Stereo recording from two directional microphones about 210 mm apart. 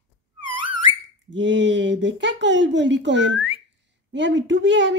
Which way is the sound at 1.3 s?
60° right (ahead or behind).